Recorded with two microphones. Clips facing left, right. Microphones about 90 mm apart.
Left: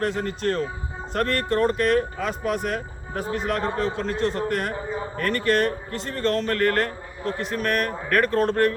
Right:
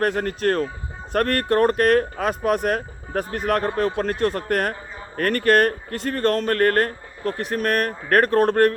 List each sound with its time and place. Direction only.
0.0 s speech: 50° right (ahead or behind)